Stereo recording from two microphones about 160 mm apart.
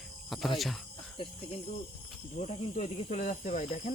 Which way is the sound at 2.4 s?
45° left (ahead or behind).